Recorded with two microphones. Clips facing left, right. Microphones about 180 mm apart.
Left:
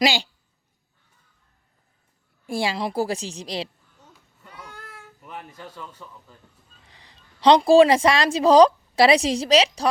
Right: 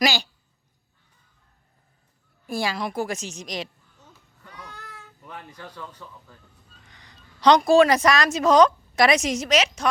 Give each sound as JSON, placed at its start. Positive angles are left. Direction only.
{"t": 0.0, "sound": "speech", "side_deg": 25}
{"t": 2.5, "sound": "a woman's voice", "side_deg": 25}
{"t": 4.4, "sound": "baby cry", "side_deg": 5}
{"t": 5.5, "sound": "a man's voice", "side_deg": 5}
{"t": 6.8, "sound": "a woman's voice", "side_deg": 30}